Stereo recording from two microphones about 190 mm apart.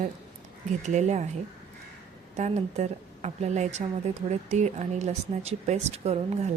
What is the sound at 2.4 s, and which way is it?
Speech, 35° right (ahead or behind).